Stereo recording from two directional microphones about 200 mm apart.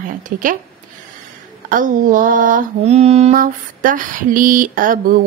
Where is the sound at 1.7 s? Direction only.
45° right (ahead or behind).